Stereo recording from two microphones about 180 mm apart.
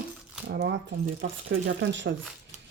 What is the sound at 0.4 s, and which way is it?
Speech, 70° right (ahead or behind).